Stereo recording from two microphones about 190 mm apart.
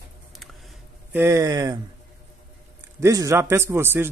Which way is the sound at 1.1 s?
15° right (ahead or behind).